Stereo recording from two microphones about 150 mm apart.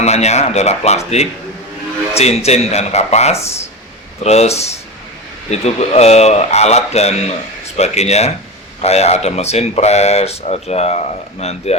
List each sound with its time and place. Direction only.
0.0 s speech: 45° left (ahead or behind)